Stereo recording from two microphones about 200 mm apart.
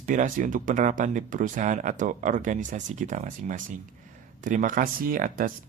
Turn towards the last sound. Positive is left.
turn(degrees=-45)  # may be behind; listen again after turning